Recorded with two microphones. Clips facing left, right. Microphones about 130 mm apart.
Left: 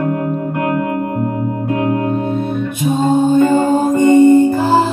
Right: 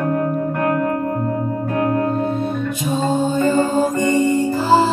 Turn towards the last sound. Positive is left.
turn(degrees=55)  # may be behind; listen again after turning